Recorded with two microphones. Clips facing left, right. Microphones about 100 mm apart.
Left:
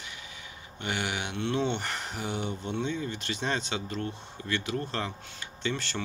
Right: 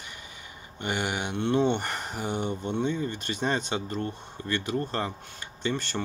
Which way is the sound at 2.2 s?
45° right (ahead or behind).